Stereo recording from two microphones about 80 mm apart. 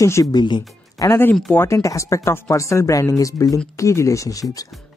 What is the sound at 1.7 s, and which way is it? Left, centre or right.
Speech, left.